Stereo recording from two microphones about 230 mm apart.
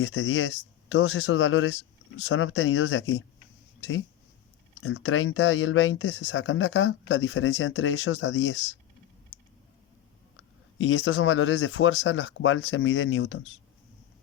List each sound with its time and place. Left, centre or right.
0.0 s speech: left
10.3 s speech: left